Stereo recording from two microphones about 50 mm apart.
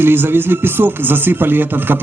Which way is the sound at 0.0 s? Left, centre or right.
Right.